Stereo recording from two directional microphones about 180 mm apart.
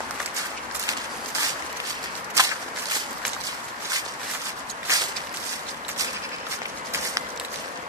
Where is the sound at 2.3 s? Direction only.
20° right (ahead or behind).